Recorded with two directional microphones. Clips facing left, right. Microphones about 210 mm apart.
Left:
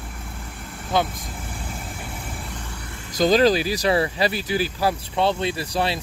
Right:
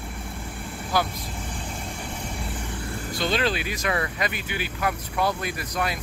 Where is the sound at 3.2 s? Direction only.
40° left (ahead or behind).